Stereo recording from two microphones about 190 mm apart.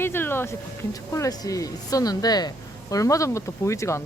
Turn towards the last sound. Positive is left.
turn(degrees=15)  # may be behind; listen again after turning